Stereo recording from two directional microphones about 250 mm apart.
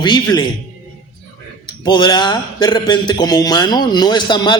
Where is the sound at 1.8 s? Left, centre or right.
Centre.